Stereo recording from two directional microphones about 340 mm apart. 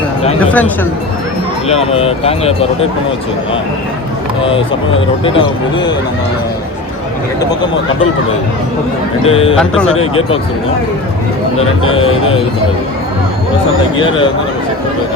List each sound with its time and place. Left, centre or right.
0.3 s speech: centre
1.6 s speech: centre
5.2 s speech: centre
9.2 s speech: centre
13.9 s speech: centre